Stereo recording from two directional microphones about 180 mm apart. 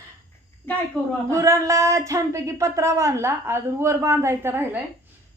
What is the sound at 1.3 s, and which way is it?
Speech, 15° right (ahead or behind).